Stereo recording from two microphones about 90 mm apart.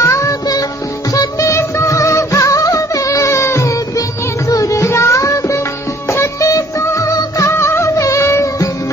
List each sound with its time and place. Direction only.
0.0 s music: 35° left (ahead or behind)